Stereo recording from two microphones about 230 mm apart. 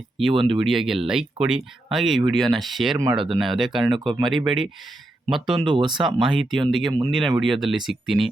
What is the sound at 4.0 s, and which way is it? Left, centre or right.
Speech, centre.